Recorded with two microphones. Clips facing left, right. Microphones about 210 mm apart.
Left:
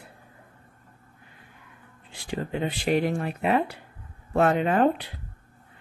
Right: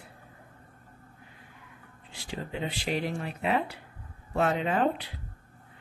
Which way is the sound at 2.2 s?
55° left (ahead or behind).